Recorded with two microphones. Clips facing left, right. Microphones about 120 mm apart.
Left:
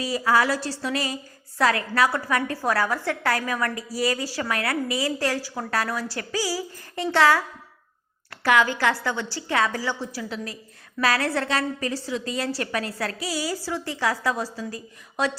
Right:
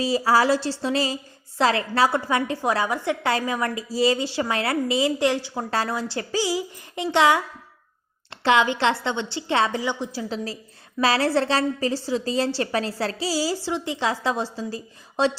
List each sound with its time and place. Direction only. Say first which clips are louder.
0.0 s a woman's voice: right 2 dB; 30° right (ahead or behind)
8.4 s a woman's voice: right 1 dB; 20° right (ahead or behind)